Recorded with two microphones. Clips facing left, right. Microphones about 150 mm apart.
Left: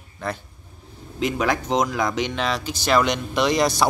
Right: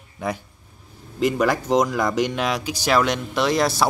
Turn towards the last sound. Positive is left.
turn(degrees=-5)  # may be behind; listen again after turning